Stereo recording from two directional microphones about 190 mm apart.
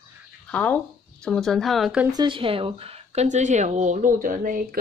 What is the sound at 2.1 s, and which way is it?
Speech, 25° right (ahead or behind).